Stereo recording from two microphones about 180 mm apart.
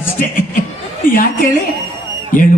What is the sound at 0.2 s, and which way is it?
Speech, 50° left (ahead or behind).